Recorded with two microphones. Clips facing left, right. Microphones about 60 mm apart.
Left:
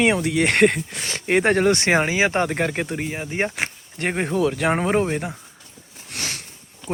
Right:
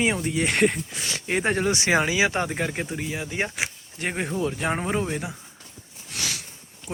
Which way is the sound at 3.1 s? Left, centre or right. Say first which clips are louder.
Left 3 dB; left.